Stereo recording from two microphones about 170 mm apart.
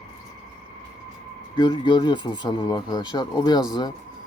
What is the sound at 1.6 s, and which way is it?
Speech, 25° left (ahead or behind).